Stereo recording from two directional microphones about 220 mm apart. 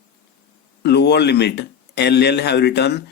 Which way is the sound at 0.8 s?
50° left (ahead or behind).